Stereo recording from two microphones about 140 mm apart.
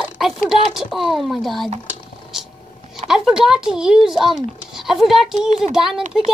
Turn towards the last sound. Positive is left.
turn(degrees=-5)  # may be behind; listen again after turning